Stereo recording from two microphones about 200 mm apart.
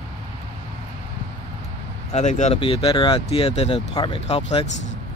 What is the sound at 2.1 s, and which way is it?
Speech, 35° left (ahead or behind).